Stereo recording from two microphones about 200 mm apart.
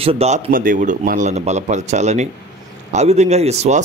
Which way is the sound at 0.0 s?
30° right (ahead or behind).